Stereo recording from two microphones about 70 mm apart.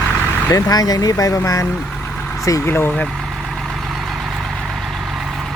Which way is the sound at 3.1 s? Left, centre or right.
Centre.